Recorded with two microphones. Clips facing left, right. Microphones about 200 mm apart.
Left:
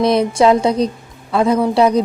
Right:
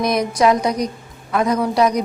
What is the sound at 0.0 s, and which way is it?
A woman's voice, 30° left (ahead or behind).